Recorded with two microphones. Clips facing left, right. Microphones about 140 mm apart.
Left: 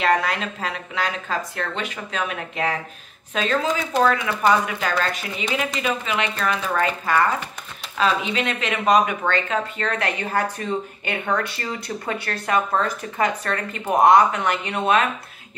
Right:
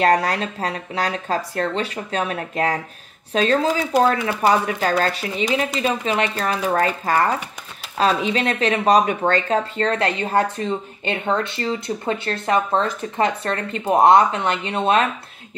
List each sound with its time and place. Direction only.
0.0 s speech: 35° right (ahead or behind)